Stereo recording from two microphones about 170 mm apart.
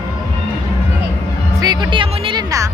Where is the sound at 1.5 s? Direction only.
25° right (ahead or behind).